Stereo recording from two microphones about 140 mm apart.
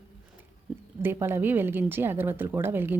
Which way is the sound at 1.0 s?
15° right (ahead or behind).